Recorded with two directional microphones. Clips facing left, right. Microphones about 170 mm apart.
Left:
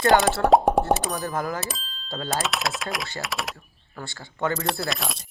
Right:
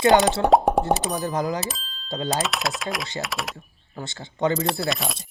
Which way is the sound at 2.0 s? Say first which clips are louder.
Right 4 dB; 15° right (ahead or behind).